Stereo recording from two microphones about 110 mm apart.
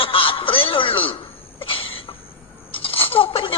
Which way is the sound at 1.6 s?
55° left (ahead or behind).